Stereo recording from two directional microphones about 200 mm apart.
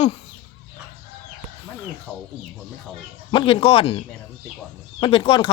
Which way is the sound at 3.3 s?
25° left (ahead or behind).